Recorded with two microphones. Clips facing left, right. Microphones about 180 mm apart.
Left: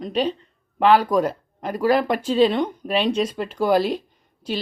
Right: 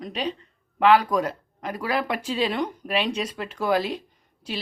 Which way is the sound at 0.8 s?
35° left (ahead or behind).